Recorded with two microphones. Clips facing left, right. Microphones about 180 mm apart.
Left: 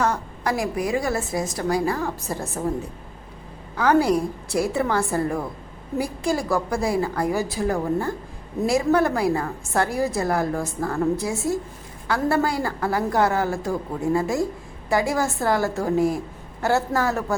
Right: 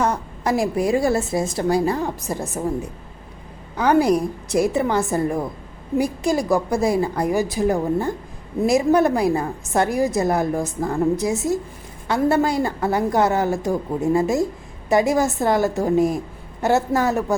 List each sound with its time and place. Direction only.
0.0 s a woman's voice: 20° right (ahead or behind)
3.8 s a woman's voice: 20° right (ahead or behind)